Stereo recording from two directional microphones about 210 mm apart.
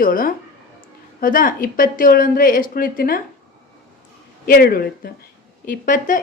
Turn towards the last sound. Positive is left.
turn(degrees=40)  # may be behind; listen again after turning